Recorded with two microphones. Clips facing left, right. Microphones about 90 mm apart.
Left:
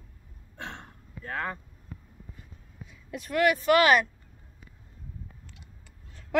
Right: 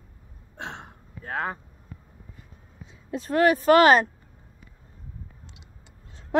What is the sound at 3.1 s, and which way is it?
Speech, 35° right (ahead or behind).